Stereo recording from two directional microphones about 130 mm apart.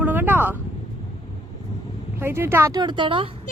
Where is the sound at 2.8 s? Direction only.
35° right (ahead or behind).